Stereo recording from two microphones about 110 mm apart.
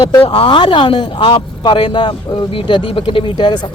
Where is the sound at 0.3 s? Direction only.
45° left (ahead or behind).